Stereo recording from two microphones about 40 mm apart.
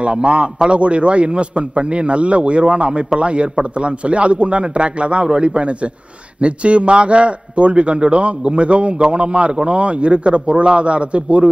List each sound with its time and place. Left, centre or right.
0.0 s a man's voice: right